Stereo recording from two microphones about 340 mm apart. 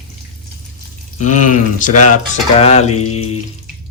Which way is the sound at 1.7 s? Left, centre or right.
Left.